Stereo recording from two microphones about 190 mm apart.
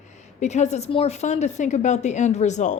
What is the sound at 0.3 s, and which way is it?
A woman's voice, 35° left (ahead or behind).